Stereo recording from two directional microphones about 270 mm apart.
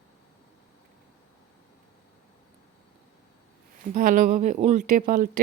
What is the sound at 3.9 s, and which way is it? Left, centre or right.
A woman's voice, right.